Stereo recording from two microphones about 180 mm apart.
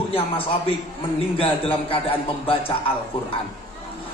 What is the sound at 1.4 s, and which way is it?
A man's voice, 30° left (ahead or behind).